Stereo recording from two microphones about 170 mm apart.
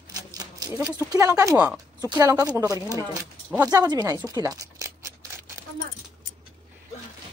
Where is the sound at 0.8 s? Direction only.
20° right (ahead or behind).